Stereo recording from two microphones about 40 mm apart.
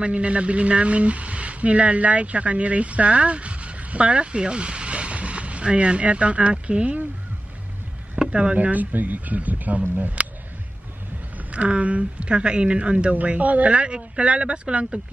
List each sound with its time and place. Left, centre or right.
0.0 s speech: right
8.3 s speech: right
8.5 s speech: right
11.3 s speech: right